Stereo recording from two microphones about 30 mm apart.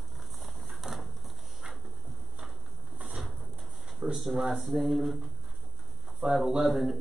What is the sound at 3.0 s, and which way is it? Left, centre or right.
Bird, right.